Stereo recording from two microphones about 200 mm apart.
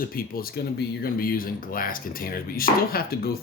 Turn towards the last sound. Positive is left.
turn(degrees=50)  # may be behind; listen again after turning